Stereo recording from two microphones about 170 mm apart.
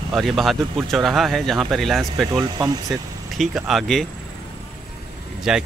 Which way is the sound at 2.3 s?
20° right (ahead or behind).